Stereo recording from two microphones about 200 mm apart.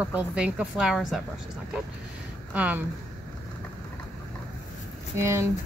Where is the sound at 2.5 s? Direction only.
5° right (ahead or behind).